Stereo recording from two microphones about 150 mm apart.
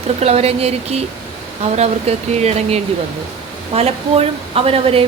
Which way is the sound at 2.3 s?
45° right (ahead or behind).